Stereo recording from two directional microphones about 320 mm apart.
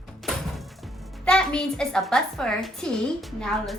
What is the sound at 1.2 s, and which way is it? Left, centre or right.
Speech, centre.